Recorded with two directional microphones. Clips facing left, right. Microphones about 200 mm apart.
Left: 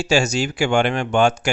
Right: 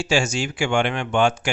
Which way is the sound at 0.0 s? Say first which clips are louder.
Left 3 dB; 40° left (ahead or behind).